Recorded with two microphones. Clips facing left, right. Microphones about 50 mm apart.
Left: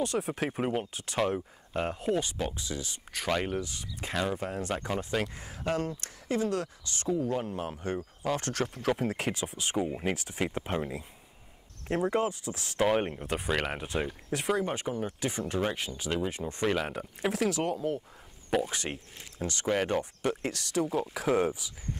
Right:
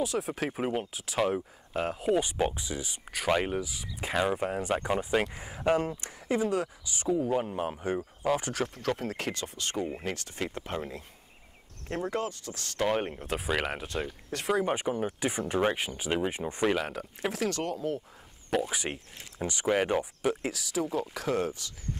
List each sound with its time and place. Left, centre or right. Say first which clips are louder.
0.0 s speech: even; centre
2.1 s speech: right 4 dB; centre
4.1 s speech: right 3 dB; centre
8.6 s speech: left 2 dB; centre
14.6 s speech: right 3 dB; centre
16.6 s speech: right 1 dB; centre
19.4 s speech: right 2 dB; centre